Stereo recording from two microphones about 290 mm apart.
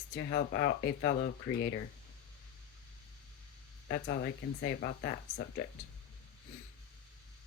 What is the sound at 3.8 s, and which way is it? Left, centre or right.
Speech, left.